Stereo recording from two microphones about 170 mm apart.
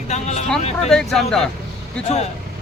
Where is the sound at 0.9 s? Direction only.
Centre (ahead or behind).